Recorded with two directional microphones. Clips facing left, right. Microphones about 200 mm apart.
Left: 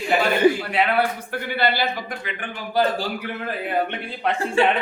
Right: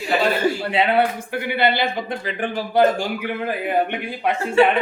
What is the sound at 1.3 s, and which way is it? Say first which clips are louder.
Speech: right 3 dB; 15° right (ahead or behind).